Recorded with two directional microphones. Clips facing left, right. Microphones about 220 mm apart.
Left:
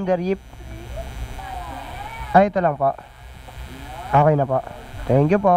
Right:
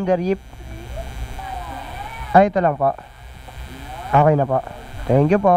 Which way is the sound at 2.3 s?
15° right (ahead or behind).